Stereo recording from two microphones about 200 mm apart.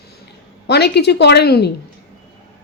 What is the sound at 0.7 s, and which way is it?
Speech, 55° left (ahead or behind).